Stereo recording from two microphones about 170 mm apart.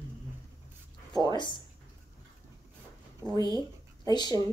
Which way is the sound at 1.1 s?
25° right (ahead or behind).